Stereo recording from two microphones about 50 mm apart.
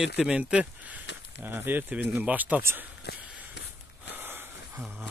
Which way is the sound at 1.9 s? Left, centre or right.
Right.